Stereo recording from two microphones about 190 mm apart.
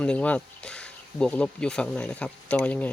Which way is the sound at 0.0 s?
5° left (ahead or behind).